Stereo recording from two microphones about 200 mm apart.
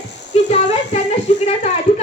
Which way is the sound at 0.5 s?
30° left (ahead or behind).